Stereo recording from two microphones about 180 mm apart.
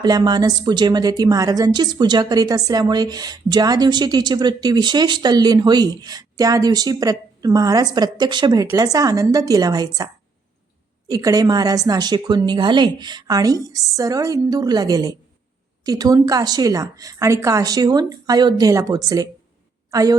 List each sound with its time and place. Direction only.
0.0 s a woman's voice: 20° right (ahead or behind)
11.1 s a woman's voice: 20° right (ahead or behind)